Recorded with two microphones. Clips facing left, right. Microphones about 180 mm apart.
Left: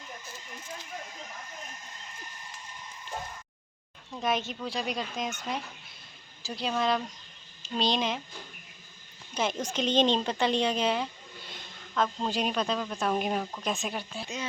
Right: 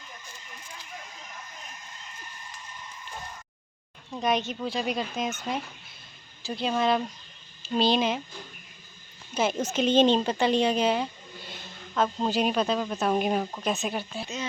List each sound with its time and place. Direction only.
4.2 s speech: centre (ahead or behind)
9.3 s a sound: 5° right (ahead or behind)
9.7 s speech: 5° right (ahead or behind)